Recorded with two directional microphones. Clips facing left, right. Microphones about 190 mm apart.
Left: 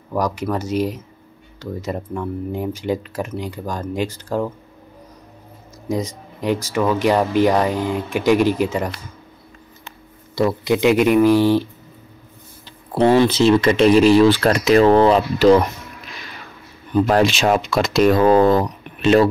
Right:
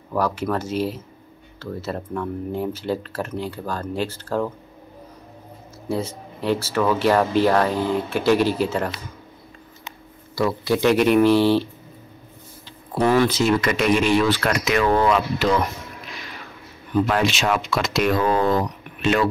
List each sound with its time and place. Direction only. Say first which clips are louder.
0.1 s speech: left 1 dB; 10° left (ahead or behind)
5.9 s speech: left 2 dB; 15° left (ahead or behind)
10.3 s speech: left 3 dB; 20° left (ahead or behind)
12.9 s speech: left 4 dB; 25° left (ahead or behind)
17.1 s speech: left 9 dB; 35° left (ahead or behind)